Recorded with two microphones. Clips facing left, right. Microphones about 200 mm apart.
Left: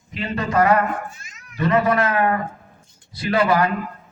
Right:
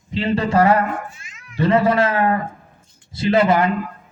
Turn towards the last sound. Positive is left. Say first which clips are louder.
# right 3 dB
turn(degrees=-25)  # may be behind; listen again after turning